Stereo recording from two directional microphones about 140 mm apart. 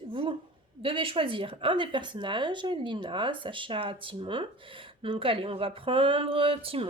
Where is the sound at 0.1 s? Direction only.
35° right (ahead or behind).